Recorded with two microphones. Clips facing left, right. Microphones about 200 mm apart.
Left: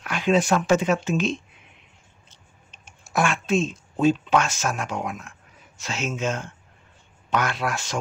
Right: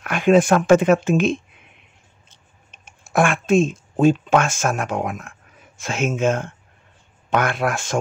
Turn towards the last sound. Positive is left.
turn(degrees=-50)  # may be behind; listen again after turning